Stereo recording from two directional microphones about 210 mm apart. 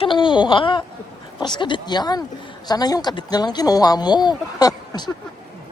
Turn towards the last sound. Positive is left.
turn(degrees=20)  # may be behind; listen again after turning